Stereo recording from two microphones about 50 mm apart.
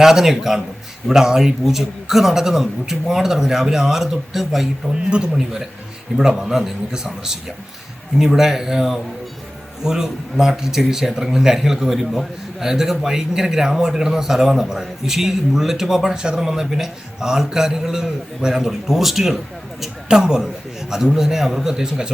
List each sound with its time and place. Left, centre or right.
0.0 s speech: centre
5.0 s a man's voice: centre